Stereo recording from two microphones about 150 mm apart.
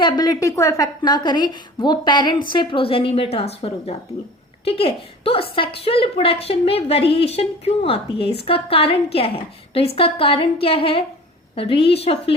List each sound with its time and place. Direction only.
0.0 s a woman's voice: 25° left (ahead or behind)